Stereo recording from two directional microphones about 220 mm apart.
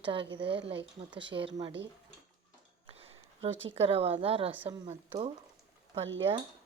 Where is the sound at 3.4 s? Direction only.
25° right (ahead or behind).